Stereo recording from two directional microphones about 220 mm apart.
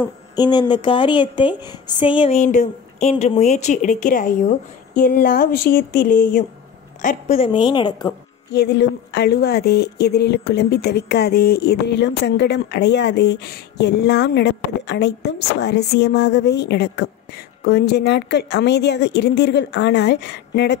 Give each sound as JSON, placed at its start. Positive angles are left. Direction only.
{"t": 0.4, "sound": "a woman's voice", "side_deg": 20}
{"t": 4.9, "sound": "a sound", "side_deg": 40}
{"t": 7.0, "sound": "a woman's voice", "side_deg": 30}
{"t": 8.5, "sound": "speech", "side_deg": 50}